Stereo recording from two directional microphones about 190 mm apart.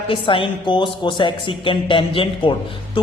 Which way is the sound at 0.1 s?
25° left (ahead or behind).